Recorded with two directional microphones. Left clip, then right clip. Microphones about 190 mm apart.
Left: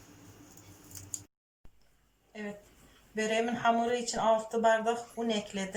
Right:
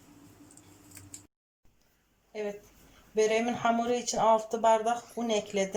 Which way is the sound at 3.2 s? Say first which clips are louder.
Right 4 dB; 15° right (ahead or behind).